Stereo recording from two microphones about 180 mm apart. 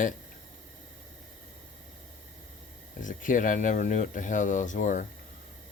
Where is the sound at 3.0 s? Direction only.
45° left (ahead or behind).